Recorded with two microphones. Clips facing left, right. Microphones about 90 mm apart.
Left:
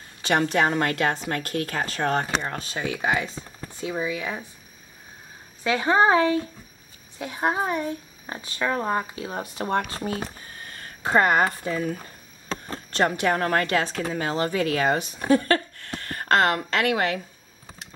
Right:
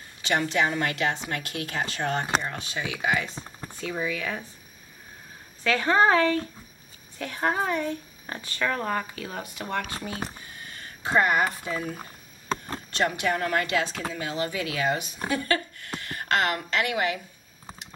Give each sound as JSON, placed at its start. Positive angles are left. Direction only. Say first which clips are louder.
{"t": 0.2, "sound": "a woman's voice", "louder": "left 3 dB", "side_deg": 40}
{"t": 3.8, "sound": "speech", "louder": "left 2 dB", "side_deg": 20}
{"t": 5.6, "sound": "speech", "louder": "left 1 dB", "side_deg": 20}
{"t": 12.9, "sound": "a woman's voice", "louder": "left 4 dB", "side_deg": 40}